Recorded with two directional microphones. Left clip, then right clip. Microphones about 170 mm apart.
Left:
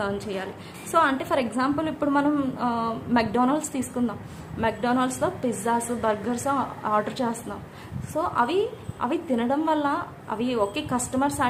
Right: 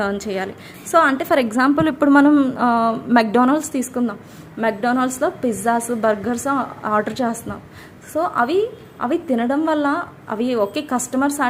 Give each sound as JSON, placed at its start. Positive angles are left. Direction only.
{"t": 0.0, "sound": "a woman's voice", "side_deg": -40}